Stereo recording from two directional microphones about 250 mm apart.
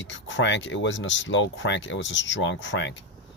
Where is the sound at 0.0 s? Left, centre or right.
Left.